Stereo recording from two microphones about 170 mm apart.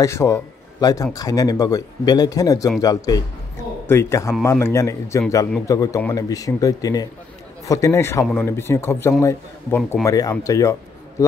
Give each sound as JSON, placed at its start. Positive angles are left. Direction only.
{"t": 0.0, "sound": "a man's voice", "side_deg": 15}